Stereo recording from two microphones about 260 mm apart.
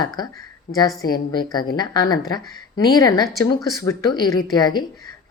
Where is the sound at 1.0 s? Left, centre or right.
Centre.